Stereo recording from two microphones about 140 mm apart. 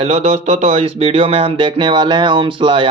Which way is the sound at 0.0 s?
50° right (ahead or behind).